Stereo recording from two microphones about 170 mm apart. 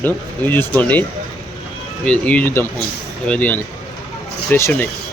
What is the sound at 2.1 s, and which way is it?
Speech, 10° left (ahead or behind).